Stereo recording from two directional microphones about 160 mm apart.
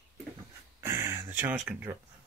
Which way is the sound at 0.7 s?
20° right (ahead or behind).